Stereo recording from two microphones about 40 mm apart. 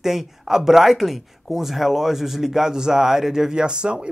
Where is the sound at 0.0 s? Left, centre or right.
Centre.